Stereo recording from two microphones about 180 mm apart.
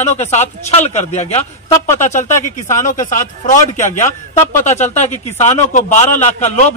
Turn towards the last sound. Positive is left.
turn(degrees=40)  # may be behind; listen again after turning